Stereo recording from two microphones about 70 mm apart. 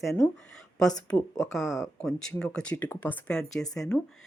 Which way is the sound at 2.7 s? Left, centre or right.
Left.